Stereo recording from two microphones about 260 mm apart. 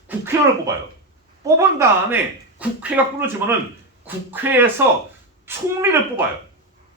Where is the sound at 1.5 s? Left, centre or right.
Centre.